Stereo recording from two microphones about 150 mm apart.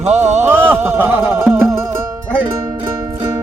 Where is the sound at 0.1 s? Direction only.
50° right (ahead or behind).